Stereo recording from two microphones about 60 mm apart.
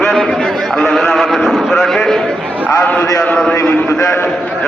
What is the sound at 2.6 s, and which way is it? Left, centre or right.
Speech, left.